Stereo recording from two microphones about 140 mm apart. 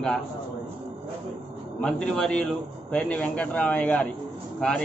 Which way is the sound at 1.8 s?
5° left (ahead or behind).